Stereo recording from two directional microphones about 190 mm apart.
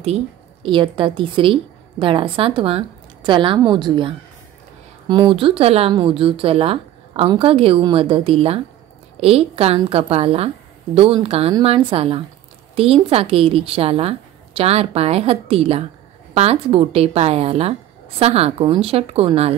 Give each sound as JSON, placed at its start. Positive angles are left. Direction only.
{"t": 0.0, "sound": "a woman's voice", "side_deg": -30}